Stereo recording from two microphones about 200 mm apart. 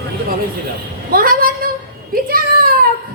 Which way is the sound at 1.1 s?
45° right (ahead or behind).